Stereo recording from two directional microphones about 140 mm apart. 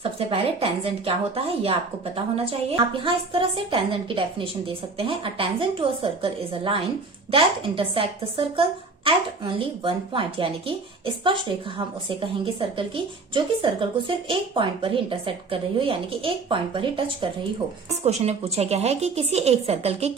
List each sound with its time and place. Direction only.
0.0 s speech: 40° right (ahead or behind)
2.1 s a woman's voice: 45° right (ahead or behind)
18.0 s speech: 50° right (ahead or behind)